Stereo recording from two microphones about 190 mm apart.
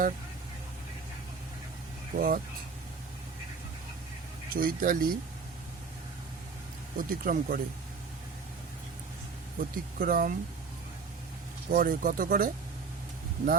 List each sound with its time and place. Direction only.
2.1 s speech: 50° right (ahead or behind)
4.5 s speech: 50° right (ahead or behind)
6.9 s speech: 45° right (ahead or behind)
9.6 s speech: 50° right (ahead or behind)
11.7 s speech: 45° right (ahead or behind)